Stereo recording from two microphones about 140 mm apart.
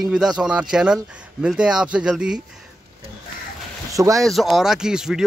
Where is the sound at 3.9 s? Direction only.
25° right (ahead or behind).